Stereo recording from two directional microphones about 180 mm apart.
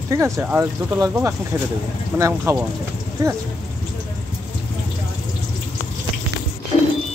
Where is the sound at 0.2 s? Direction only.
15° right (ahead or behind).